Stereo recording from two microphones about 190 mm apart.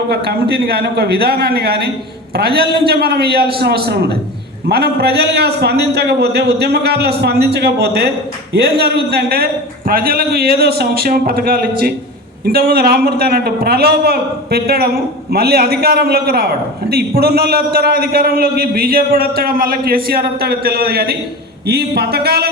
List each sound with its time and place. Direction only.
0.1 s a man's voice: 60° right (ahead or behind)